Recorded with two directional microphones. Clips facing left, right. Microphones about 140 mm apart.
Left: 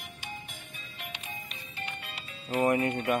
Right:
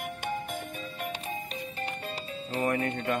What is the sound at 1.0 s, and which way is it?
Music, 40° right (ahead or behind).